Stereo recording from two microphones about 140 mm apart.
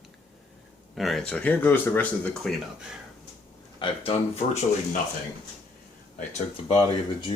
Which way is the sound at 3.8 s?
45° left (ahead or behind).